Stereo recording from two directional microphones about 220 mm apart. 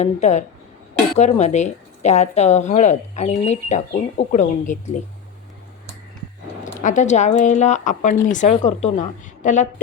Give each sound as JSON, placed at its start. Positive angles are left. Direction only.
{"t": 0.0, "sound": "a woman's voice", "side_deg": 30}
{"t": 6.8, "sound": "a woman's voice", "side_deg": 35}